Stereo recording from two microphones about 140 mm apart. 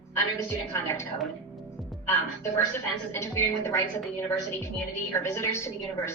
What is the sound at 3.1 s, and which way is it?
A woman's voice, 20° left (ahead or behind).